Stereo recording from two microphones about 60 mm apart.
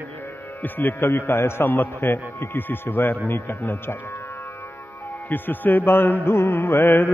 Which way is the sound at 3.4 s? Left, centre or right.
Left.